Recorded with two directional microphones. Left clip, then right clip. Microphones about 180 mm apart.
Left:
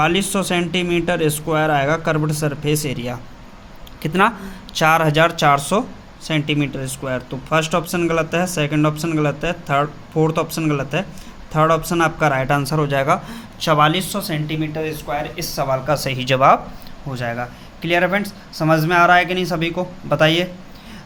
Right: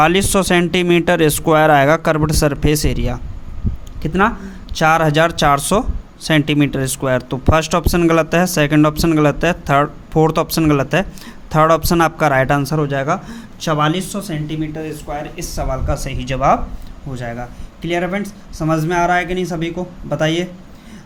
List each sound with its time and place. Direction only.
0.0 s speech: 50° right (ahead or behind)
4.0 s speech: 20° right (ahead or behind); by 12.7 s 40° right (ahead or behind)
12.7 s a man's voice: 25° right (ahead or behind)